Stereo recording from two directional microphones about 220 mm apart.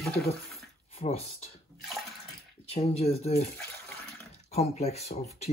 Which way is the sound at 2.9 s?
30° left (ahead or behind).